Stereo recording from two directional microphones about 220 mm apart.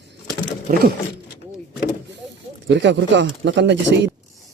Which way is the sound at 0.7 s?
45° right (ahead or behind).